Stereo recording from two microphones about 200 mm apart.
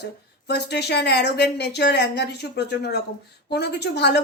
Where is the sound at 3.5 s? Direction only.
55° left (ahead or behind).